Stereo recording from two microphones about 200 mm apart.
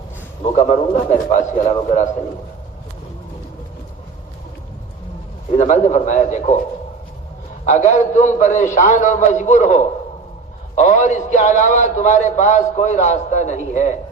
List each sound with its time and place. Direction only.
0.5 s a man's voice: 40° left (ahead or behind)
5.5 s a man's voice: 35° left (ahead or behind)
7.6 s a man's voice: 35° left (ahead or behind)